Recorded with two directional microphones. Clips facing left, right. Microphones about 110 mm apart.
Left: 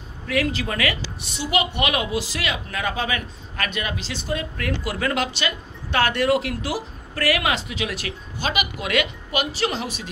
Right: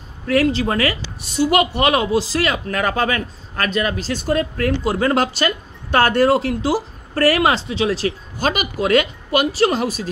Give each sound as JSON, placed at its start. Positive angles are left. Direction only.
{"t": 0.3, "sound": "a woman's voice", "side_deg": -35}